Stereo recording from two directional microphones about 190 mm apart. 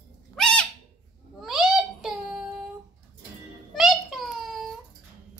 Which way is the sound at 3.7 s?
Centre (ahead or behind).